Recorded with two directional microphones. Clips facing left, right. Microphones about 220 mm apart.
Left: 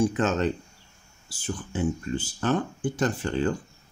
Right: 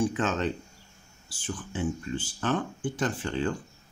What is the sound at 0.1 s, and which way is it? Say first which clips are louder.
Speech: left 4 dB; 40° left (ahead or behind).